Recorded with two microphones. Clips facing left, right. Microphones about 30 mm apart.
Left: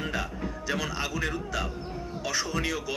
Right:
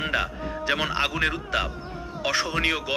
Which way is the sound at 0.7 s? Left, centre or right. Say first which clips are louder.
Right 6 dB; right.